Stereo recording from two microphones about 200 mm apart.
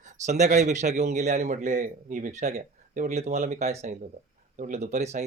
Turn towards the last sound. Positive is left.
turn(degrees=-35)  # may be behind; listen again after turning